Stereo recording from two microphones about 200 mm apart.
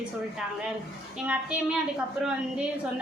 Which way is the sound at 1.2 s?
5° right (ahead or behind).